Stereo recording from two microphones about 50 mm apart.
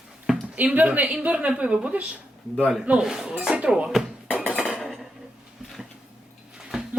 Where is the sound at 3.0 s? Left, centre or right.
Centre.